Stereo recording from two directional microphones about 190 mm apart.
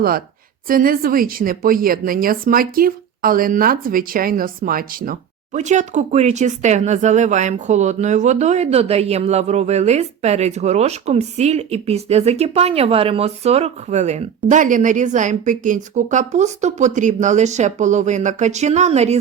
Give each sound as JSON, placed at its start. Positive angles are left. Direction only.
{"t": 0.7, "sound": "speech", "side_deg": -50}
{"t": 5.5, "sound": "speech", "side_deg": -40}